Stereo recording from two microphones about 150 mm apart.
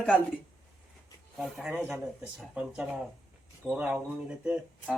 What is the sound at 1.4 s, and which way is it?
Speech, 5° right (ahead or behind).